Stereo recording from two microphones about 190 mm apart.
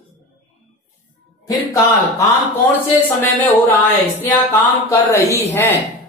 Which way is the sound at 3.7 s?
10° left (ahead or behind).